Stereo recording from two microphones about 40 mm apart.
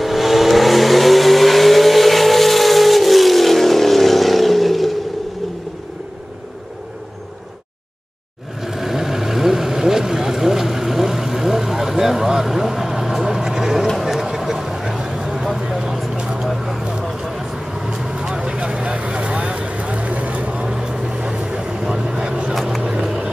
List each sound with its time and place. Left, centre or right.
0.0 s vehicle: centre
8.6 s vehicle: centre
13.9 s a sound: centre
15.7 s vehicle: centre
16.4 s vehicle: centre; by 20.6 s right
20.6 s vehicle: centre
22.5 s vehicle: centre
22.8 s a sound: centre